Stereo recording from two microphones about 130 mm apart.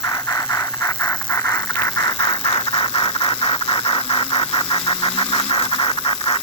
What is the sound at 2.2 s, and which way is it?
Squeal, 40° left (ahead or behind).